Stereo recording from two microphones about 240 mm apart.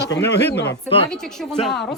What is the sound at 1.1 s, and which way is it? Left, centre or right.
Speech, centre.